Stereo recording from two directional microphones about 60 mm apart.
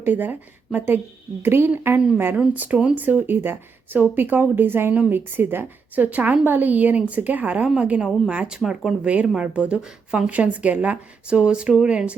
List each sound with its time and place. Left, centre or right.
0.0 s speech: right
2.3 s a woman's voice: right
10.2 s a woman's voice: right